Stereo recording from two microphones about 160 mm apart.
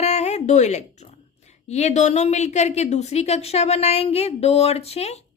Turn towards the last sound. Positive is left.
turn(degrees=40)  # may be behind; listen again after turning